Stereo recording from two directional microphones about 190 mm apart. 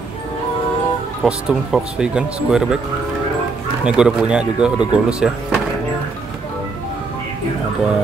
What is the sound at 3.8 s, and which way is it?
Speech, 5° right (ahead or behind).